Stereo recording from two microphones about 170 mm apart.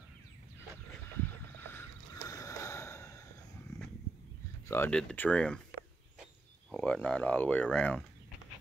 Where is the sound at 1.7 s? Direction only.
15° left (ahead or behind).